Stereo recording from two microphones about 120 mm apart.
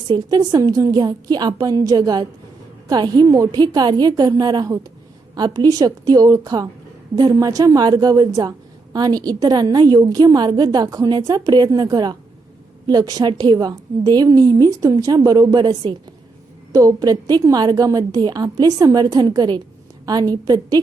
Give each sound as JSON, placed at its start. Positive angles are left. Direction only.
{"t": 0.1, "sound": "a woman's voice", "side_deg": -35}